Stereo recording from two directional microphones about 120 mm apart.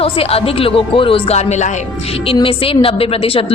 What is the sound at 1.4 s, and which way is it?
Speech, 70° left (ahead or behind).